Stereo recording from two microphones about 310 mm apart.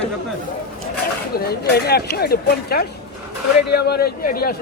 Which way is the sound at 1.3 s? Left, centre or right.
Left.